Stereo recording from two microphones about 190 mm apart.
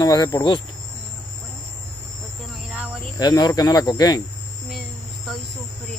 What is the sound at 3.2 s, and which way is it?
Speech, 20° left (ahead or behind).